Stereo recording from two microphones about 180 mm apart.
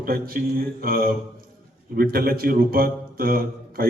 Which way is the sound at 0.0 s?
55° right (ahead or behind).